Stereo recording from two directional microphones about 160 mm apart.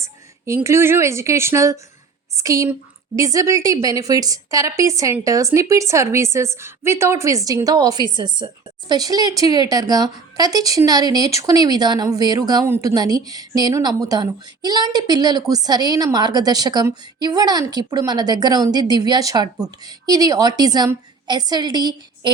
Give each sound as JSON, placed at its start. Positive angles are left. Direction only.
{"t": 0.0, "sound": "a woman's voice", "side_deg": -15}